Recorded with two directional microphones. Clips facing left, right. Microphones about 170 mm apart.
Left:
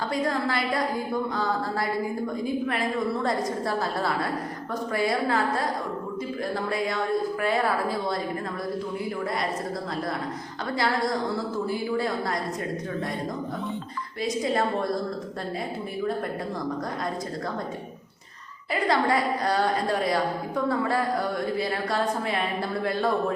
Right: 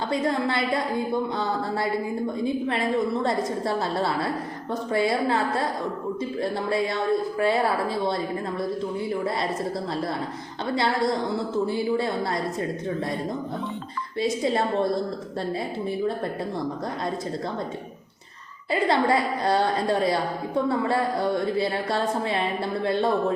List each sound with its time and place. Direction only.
0.1 s speech: 25° right (ahead or behind)
10.8 s speech: 25° right (ahead or behind)
18.7 s speech: 25° right (ahead or behind)